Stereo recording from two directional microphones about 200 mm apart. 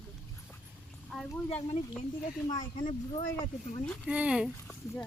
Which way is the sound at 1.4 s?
30° left (ahead or behind).